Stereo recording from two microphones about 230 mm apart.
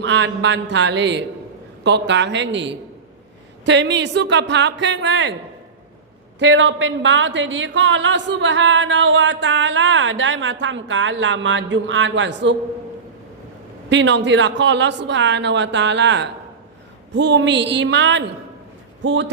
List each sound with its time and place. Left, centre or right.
0.0 s a woman's voice: right
6.4 s a woman's voice: right
13.9 s a woman's voice: right